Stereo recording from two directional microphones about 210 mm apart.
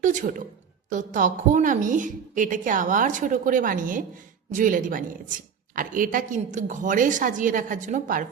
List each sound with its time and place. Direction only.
0.0 s a woman's voice: 35° right (ahead or behind)